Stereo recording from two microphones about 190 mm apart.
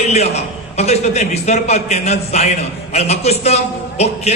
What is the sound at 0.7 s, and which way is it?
A man's voice, 35° left (ahead or behind).